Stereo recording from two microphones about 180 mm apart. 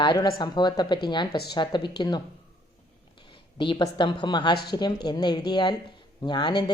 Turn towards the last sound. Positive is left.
turn(degrees=25)  # may be behind; listen again after turning